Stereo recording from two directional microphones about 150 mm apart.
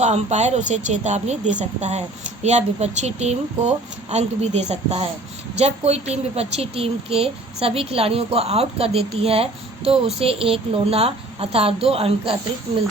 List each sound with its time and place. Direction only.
0.0 s a woman's voice: 50° right (ahead or behind)